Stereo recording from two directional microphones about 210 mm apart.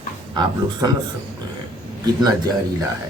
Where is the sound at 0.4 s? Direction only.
20° right (ahead or behind).